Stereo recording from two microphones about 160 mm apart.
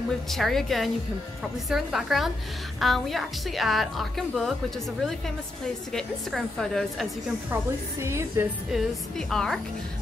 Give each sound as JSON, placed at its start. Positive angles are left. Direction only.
{"t": 0.3, "sound": "a woman's voice", "side_deg": 0}
{"t": 5.9, "sound": "a woman's voice", "side_deg": 5}
{"t": 7.5, "sound": "speech", "side_deg": -15}
{"t": 8.7, "sound": "a woman's voice", "side_deg": 5}